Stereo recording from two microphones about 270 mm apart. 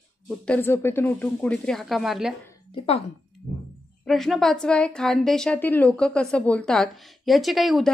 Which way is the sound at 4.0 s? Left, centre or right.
Centre.